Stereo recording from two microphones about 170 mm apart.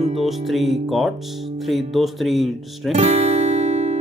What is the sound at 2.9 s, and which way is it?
Music, 40° right (ahead or behind).